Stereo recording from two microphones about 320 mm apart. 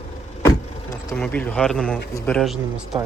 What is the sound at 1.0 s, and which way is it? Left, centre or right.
Speech, centre.